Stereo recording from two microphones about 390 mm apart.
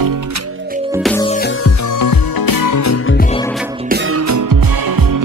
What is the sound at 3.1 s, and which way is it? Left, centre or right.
Music, centre.